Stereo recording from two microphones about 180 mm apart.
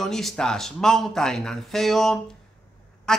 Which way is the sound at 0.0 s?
Centre (ahead or behind).